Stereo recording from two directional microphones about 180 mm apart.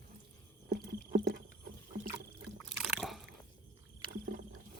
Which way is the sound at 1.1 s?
60° right (ahead or behind).